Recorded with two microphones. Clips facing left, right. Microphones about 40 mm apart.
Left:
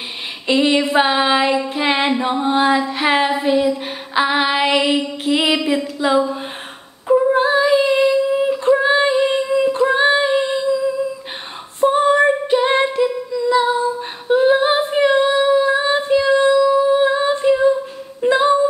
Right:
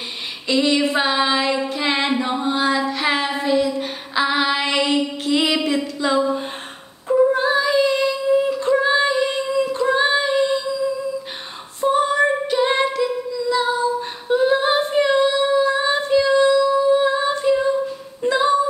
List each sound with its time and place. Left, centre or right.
0.5 s child singing: left
3.7 s female singing: centre
12.3 s female singing: centre
14.3 s singing: left
15.0 s female singing: left
15.4 s singing: centre
18.3 s humming: left